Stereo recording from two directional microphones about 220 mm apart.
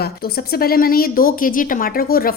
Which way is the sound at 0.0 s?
45° left (ahead or behind).